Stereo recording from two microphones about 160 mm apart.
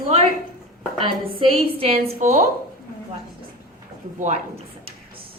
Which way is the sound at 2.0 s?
60° right (ahead or behind).